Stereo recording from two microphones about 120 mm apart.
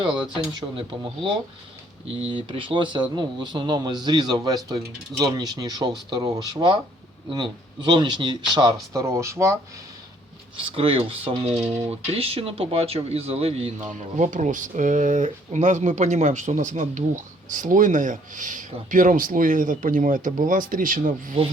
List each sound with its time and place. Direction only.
0.5 s speech: 45° right (ahead or behind); by 9.6 s 25° right (ahead or behind)
10.6 s speech: 50° right (ahead or behind)
13.8 s speech: 90° right